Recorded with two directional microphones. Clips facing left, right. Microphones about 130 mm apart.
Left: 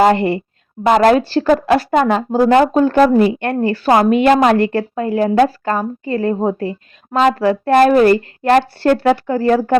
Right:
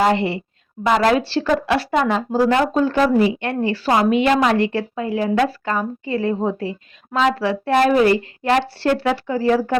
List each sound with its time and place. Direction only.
0.0 s speech: 50° left (ahead or behind)